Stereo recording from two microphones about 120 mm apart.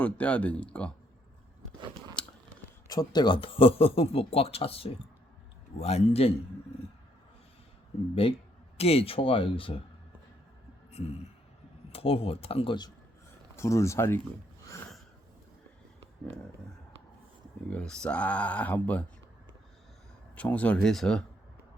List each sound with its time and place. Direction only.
0.0 s speech: 10° left (ahead or behind)
2.2 s a sound: 10° left (ahead or behind)
2.8 s a man's voice: 35° left (ahead or behind); by 6.3 s 60° left (ahead or behind)
8.8 s a man's voice: 55° left (ahead or behind)
10.9 s a man's voice: 60° left (ahead or behind); by 12.9 s 40° left (ahead or behind)
13.6 s speech: 25° left (ahead or behind)
17.7 s speech: 10° left (ahead or behind)
20.3 s speech: 10° left (ahead or behind)